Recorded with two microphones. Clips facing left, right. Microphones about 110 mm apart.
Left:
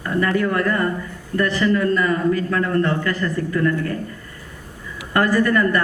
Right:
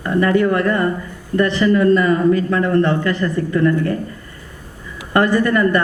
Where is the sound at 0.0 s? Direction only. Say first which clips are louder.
Right 5 dB; 25° right (ahead or behind).